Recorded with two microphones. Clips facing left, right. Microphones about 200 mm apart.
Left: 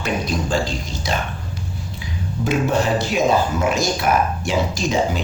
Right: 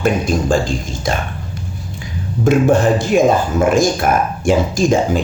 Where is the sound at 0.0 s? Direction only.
50° right (ahead or behind).